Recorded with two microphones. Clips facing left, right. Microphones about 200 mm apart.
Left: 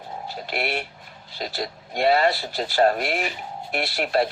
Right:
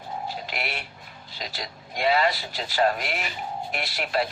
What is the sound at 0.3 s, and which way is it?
Speech, 40° left (ahead or behind).